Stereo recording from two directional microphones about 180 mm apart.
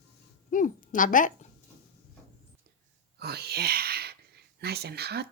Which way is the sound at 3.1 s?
65° right (ahead or behind).